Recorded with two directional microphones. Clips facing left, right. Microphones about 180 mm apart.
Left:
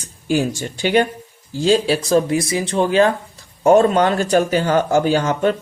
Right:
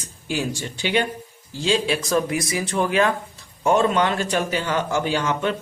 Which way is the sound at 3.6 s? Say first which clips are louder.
Left 6 dB; 40° left (ahead or behind).